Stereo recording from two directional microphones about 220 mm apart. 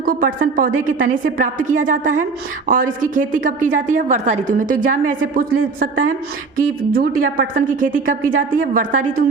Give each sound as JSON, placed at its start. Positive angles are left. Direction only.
{"t": 0.0, "sound": "a woman's voice", "side_deg": -40}